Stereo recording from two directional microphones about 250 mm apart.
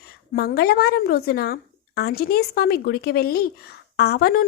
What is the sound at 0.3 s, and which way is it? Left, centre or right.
A woman's voice, left.